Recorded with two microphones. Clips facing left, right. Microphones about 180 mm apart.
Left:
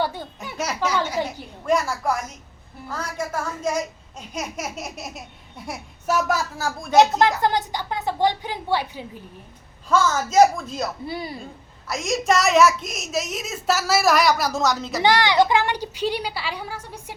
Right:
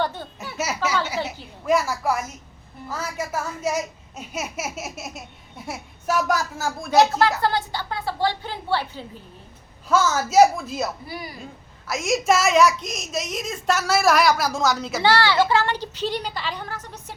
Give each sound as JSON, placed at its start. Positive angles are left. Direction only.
{"t": 0.0, "sound": "a child's voice", "side_deg": 10}
{"t": 0.5, "sound": "a child's voice", "side_deg": -5}
{"t": 6.9, "sound": "speech", "side_deg": 20}
{"t": 9.9, "sound": "a child's voice", "side_deg": -5}
{"t": 11.0, "sound": "speech", "side_deg": 25}
{"t": 11.9, "sound": "a child's voice", "side_deg": 0}
{"t": 15.0, "sound": "speech", "side_deg": 15}